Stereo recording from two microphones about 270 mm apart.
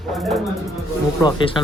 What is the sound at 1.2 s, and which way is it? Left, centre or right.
Speech, centre.